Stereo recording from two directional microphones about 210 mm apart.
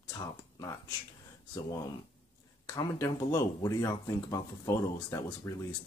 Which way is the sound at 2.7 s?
15° left (ahead or behind).